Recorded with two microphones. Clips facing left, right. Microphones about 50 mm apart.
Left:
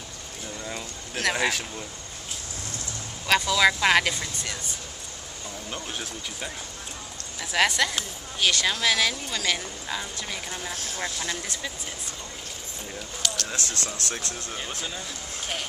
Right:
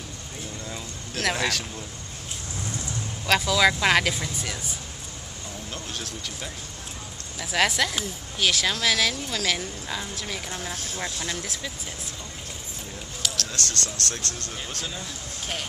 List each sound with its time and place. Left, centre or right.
0.7 s a sound: centre
1.2 s speech: centre
3.3 s speech: centre
5.7 s speech: centre
7.3 s speech: centre
13.5 s speech: centre